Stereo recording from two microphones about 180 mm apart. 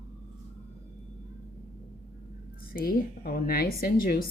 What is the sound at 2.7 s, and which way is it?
Speech, 55° left (ahead or behind).